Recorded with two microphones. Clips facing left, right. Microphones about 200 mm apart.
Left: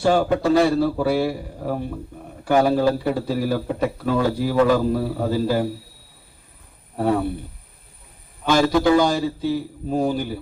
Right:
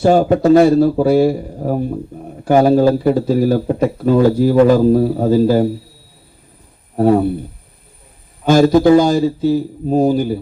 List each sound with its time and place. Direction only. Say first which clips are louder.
0.0 s a man's voice: right 7 dB; 45° right (ahead or behind)
6.9 s a man's voice: right 8 dB; 45° right (ahead or behind)
8.4 s a man's voice: right 7 dB; 45° right (ahead or behind)